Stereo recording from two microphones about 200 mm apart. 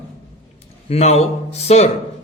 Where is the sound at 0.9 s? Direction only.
30° left (ahead or behind).